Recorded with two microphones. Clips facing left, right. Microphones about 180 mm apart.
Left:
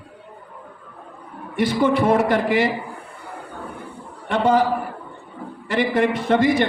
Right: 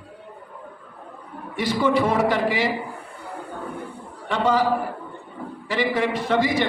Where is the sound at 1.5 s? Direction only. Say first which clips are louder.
Left 2 dB; 55° left (ahead or behind).